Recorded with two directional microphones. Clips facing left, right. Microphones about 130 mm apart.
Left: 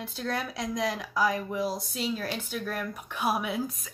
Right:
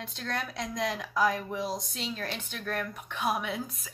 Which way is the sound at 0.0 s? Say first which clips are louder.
Left 3 dB; 5° left (ahead or behind).